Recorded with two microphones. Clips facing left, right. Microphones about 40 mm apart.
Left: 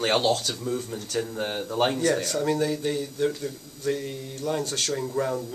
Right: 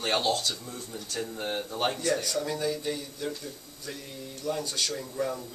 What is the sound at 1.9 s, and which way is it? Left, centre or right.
Speech, left.